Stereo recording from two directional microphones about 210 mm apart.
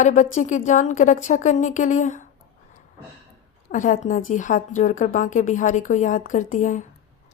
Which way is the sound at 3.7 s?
35° left (ahead or behind).